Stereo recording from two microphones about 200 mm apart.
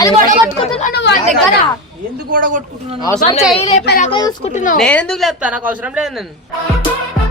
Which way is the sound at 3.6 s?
30° left (ahead or behind).